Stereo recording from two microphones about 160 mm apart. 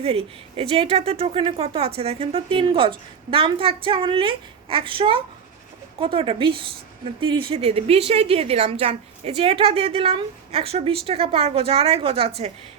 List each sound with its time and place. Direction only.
0.0 s speech: 35° right (ahead or behind)